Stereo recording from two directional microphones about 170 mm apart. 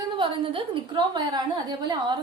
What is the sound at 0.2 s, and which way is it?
A woman's voice, 30° right (ahead or behind).